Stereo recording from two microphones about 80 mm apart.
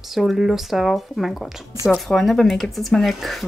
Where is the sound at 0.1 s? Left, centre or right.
Centre.